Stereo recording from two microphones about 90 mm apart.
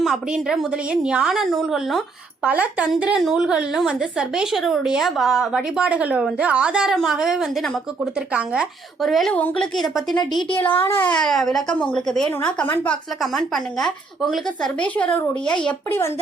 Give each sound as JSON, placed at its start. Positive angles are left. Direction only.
{"t": 0.0, "sound": "speech", "side_deg": -5}
{"t": 2.4, "sound": "a woman's voice", "side_deg": -15}
{"t": 9.0, "sound": "speech", "side_deg": 0}
{"t": 9.3, "sound": "speech", "side_deg": 15}
{"t": 9.7, "sound": "speech", "side_deg": 0}
{"t": 10.5, "sound": "a child's voice", "side_deg": 20}
{"t": 11.1, "sound": "speech", "side_deg": 5}
{"t": 12.6, "sound": "a child's voice", "side_deg": 20}
{"t": 13.2, "sound": "speech", "side_deg": 0}
{"t": 14.8, "sound": "speech", "side_deg": 15}